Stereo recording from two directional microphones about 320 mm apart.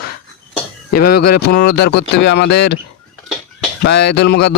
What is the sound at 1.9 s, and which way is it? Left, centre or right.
Speech, left.